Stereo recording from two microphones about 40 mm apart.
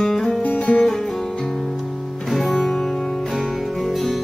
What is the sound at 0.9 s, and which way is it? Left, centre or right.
Guitar, centre.